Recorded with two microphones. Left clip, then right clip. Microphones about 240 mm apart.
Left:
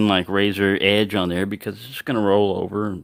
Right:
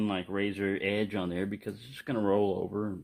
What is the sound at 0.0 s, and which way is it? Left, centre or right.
Speech, left.